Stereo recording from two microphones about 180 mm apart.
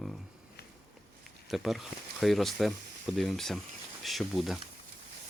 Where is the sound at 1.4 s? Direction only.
Centre (ahead or behind).